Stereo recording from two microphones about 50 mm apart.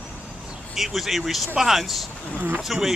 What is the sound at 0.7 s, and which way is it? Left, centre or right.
Speech, centre.